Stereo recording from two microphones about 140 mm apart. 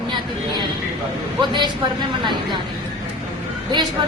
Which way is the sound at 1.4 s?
30° right (ahead or behind).